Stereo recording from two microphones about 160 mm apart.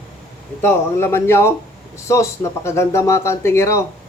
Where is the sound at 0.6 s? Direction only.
15° left (ahead or behind).